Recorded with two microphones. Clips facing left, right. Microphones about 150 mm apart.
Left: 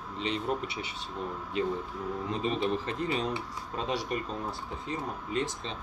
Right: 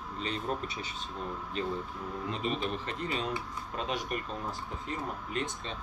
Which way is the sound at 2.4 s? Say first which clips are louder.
Left 4 dB; 30° left (ahead or behind).